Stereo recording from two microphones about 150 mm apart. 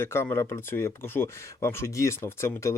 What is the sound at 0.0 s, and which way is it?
Speech, 15° left (ahead or behind).